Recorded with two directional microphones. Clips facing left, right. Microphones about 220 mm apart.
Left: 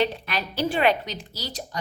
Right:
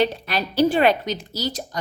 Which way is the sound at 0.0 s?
35° right (ahead or behind).